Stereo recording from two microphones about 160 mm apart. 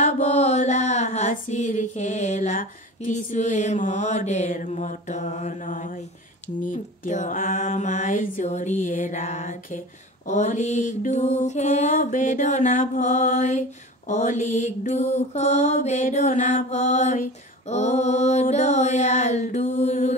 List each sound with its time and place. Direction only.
0.0 s mantra: 45° left (ahead or behind)